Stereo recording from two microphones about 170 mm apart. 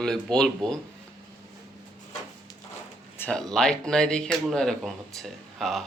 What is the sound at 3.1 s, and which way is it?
Speech, 10° left (ahead or behind).